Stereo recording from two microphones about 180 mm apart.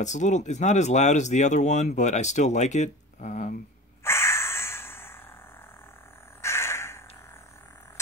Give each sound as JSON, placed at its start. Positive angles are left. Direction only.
{"t": 0.0, "sound": "speech", "side_deg": 40}
{"t": 4.0, "sound": "dog", "side_deg": 15}
{"t": 6.4, "sound": "crow", "side_deg": 15}